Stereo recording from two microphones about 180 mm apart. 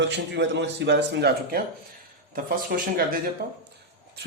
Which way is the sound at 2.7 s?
60° right (ahead or behind).